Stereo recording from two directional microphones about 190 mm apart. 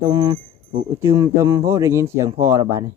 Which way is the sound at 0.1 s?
20° right (ahead or behind).